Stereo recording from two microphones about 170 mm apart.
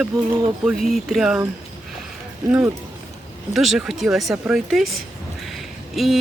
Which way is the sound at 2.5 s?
10° right (ahead or behind).